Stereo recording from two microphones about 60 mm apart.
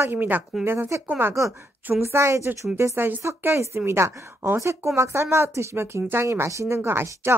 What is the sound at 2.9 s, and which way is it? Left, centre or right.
Speech, right.